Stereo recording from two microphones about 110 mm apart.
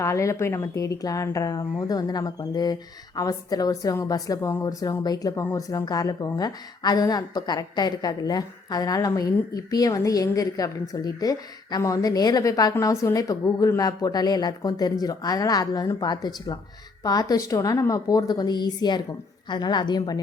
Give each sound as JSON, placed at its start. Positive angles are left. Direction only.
{"t": 0.0, "sound": "a woman's voice", "side_deg": 25}